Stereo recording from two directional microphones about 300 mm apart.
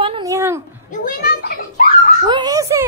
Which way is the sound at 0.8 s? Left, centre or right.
Left.